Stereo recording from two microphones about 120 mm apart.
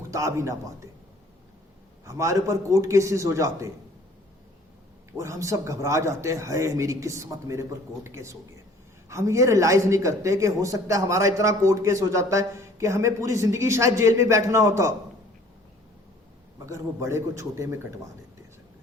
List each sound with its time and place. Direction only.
0.1 s speech: 25° right (ahead or behind)
2.0 s speech: 25° right (ahead or behind)
5.1 s speech: 25° right (ahead or behind)
16.6 s speech: 25° right (ahead or behind)